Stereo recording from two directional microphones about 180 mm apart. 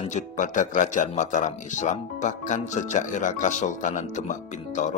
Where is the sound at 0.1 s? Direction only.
45° left (ahead or behind).